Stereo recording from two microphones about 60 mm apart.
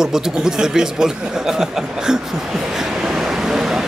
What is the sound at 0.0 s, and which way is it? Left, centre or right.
Speech, centre.